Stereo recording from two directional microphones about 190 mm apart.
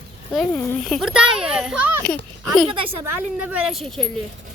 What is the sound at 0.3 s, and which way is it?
A child's voice, centre (ahead or behind).